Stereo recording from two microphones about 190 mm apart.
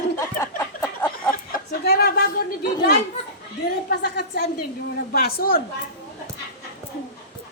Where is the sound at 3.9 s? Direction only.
60° left (ahead or behind).